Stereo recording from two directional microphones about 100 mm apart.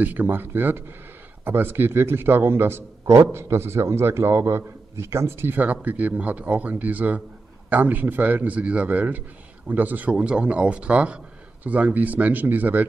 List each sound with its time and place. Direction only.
0.0 s a man's voice: 20° right (ahead or behind)